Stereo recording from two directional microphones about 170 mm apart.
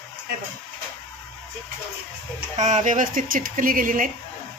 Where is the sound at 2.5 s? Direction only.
45° right (ahead or behind).